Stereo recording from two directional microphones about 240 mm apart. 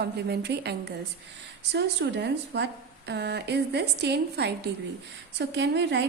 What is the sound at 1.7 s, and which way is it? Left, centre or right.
A woman's voice, right.